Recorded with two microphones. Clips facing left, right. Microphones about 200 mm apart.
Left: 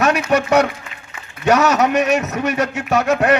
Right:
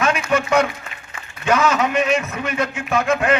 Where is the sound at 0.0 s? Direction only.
40° left (ahead or behind).